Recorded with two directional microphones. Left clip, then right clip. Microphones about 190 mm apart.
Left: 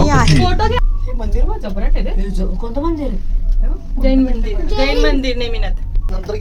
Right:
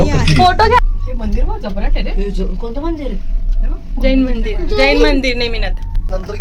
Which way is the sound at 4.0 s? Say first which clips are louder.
Right 1 dB; 15° right (ahead or behind).